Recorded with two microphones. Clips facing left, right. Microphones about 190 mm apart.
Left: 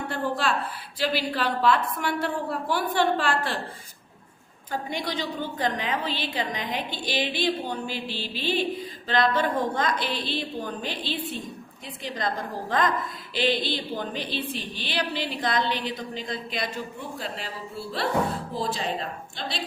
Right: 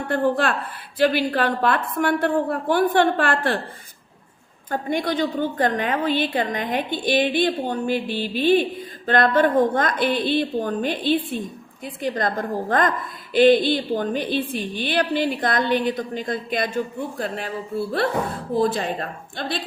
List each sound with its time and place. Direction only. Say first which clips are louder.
0.1 s a woman's voice: right 8 dB; 55° right (ahead or behind)
4.7 s a woman's voice: right 7 dB; 55° right (ahead or behind)